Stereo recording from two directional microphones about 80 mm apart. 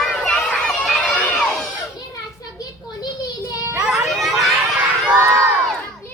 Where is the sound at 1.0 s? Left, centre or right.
Centre.